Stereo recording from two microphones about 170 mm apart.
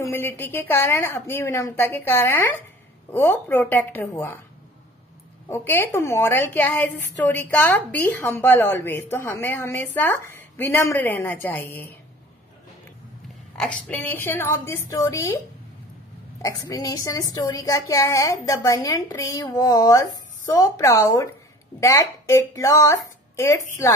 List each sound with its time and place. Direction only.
0.0 s a woman's voice: 15° left (ahead or behind)
5.5 s a woman's voice: 10° left (ahead or behind)
13.6 s a woman's voice: 5° left (ahead or behind)
16.4 s a woman's voice: 20° left (ahead or behind)